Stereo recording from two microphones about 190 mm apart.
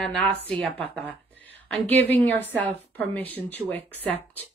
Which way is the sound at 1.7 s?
10° left (ahead or behind).